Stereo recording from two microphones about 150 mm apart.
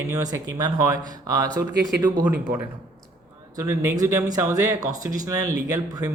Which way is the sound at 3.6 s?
20° right (ahead or behind).